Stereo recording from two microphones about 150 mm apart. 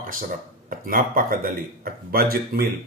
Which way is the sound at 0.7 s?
70° right (ahead or behind).